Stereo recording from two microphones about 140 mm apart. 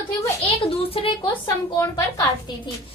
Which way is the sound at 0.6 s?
40° left (ahead or behind).